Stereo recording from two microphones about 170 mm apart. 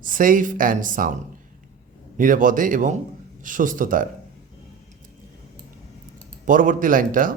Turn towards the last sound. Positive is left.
turn(degrees=-55)  # may be behind; listen again after turning